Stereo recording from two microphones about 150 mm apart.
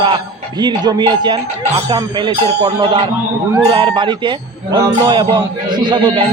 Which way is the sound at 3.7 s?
35° right (ahead or behind).